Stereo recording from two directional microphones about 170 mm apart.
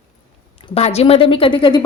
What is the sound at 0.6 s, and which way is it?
A woman's voice, 35° left (ahead or behind).